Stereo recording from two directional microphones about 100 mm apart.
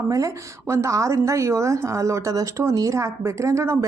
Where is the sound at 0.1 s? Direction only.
35° right (ahead or behind).